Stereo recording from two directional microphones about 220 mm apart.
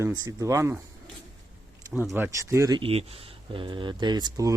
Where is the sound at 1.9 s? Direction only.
5° right (ahead or behind).